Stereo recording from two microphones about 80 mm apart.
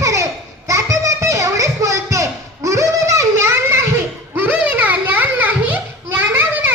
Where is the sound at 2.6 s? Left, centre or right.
Right.